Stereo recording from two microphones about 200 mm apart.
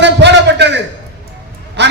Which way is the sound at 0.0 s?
60° right (ahead or behind).